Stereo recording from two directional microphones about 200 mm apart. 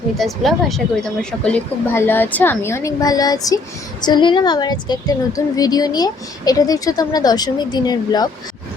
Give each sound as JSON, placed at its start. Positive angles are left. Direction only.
{"t": 0.2, "sound": "a woman's voice", "side_deg": 0}